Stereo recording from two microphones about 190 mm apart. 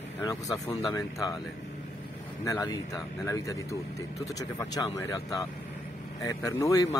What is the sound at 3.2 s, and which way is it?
Speech, 15° left (ahead or behind).